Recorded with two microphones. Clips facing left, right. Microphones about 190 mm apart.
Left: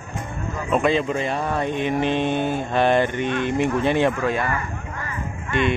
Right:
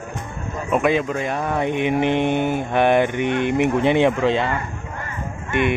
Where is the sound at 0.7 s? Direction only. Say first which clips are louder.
Right 1 dB; 10° right (ahead or behind).